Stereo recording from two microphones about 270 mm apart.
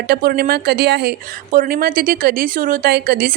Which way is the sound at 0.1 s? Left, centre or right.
Right.